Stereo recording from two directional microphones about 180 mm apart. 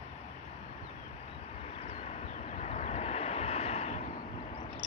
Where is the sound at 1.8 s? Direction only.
40° left (ahead or behind).